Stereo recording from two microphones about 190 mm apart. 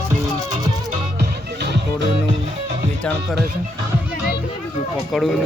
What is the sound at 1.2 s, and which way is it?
Music, 60° right (ahead or behind).